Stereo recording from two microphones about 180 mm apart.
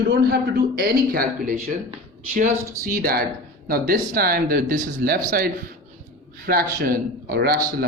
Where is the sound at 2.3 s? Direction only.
50° right (ahead or behind).